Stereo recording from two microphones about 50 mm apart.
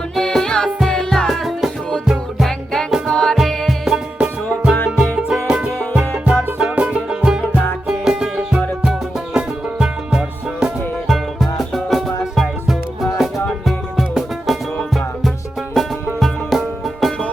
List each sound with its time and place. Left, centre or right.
0.2 s music: centre
1.3 s music: centre
3.1 s music: centre
3.8 s music: centre
11.1 s music: centre
15.8 s music: centre